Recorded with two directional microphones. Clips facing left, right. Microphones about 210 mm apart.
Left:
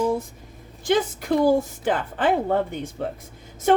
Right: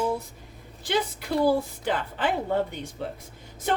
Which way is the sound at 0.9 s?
45° left (ahead or behind).